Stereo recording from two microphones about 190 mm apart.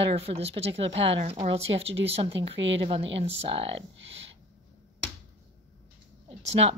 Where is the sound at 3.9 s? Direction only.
70° right (ahead or behind).